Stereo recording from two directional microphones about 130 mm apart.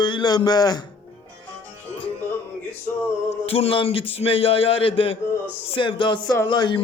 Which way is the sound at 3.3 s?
50° left (ahead or behind).